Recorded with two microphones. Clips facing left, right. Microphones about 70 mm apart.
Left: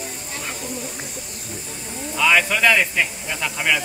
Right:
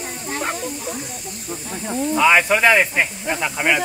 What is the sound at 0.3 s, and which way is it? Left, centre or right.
Snake, right.